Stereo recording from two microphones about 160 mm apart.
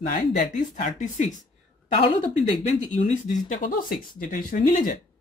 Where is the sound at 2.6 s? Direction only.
45° left (ahead or behind).